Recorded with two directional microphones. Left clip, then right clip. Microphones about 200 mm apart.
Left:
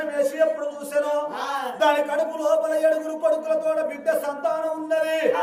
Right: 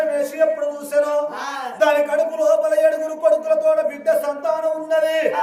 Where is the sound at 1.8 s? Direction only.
10° right (ahead or behind).